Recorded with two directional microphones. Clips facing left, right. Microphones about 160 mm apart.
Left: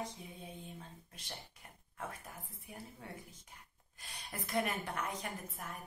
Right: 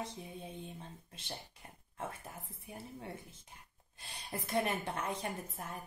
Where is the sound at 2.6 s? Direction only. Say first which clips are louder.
Right 5 dB; 25° right (ahead or behind).